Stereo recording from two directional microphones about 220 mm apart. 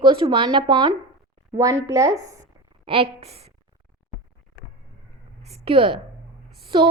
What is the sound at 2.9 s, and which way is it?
Speech, 25° right (ahead or behind).